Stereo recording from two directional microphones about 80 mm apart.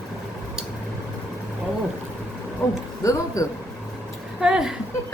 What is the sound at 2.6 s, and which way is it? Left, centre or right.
Speech, left.